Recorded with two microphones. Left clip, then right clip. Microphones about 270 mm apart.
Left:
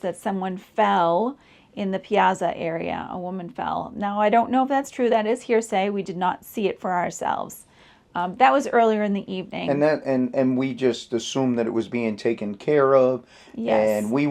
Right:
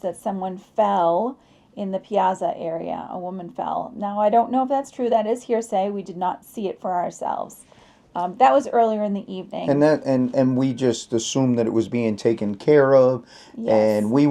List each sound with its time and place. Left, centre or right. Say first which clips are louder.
0.0 s speech: right 1 dB; left
3.2 s speech: right 2 dB; left
9.6 s speech: right 3 dB; right